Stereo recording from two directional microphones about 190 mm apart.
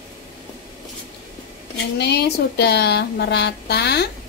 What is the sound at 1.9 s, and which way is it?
Speech, 60° left (ahead or behind).